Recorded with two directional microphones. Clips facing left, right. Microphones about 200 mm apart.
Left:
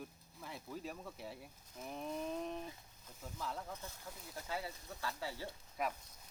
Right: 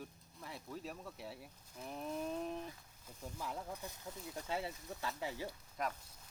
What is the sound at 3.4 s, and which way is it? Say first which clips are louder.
Speech: even; 10° right (ahead or behind).